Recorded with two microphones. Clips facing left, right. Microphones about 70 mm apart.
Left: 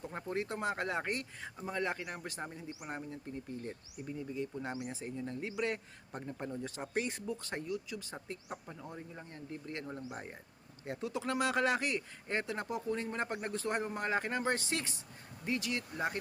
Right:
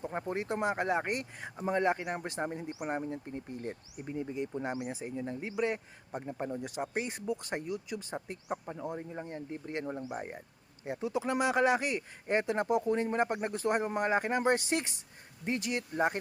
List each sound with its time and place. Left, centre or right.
0.0 s speech: right
4.4 s speech: right
7.4 s speech: right
12.3 s speech: right